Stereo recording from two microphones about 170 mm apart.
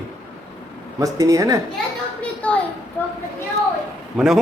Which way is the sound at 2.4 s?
10° left (ahead or behind).